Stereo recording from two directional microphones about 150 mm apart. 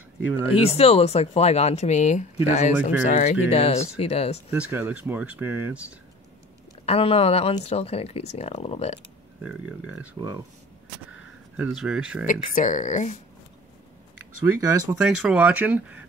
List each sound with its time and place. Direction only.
0.7 s speech: 40° left (ahead or behind)
4.5 s speech: 10° right (ahead or behind)
6.9 s speech: 40° left (ahead or behind)
9.4 s speech: 5° right (ahead or behind)
10.2 s speech: 30° right (ahead or behind)
11.1 s speech: 10° right (ahead or behind)
12.3 s speech: 60° left (ahead or behind)
14.4 s speech: 20° right (ahead or behind)
15.0 s speech: 5° right (ahead or behind)